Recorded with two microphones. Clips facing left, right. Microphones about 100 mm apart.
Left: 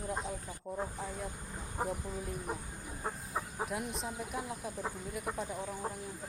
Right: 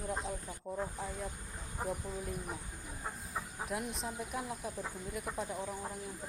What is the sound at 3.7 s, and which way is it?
Speech, centre (ahead or behind).